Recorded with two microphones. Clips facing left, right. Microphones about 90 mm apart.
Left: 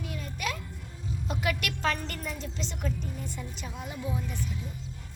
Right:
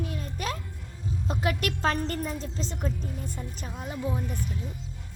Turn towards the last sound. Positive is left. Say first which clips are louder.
# right 3 dB
turn(degrees=-45)  # may be behind; listen again after turning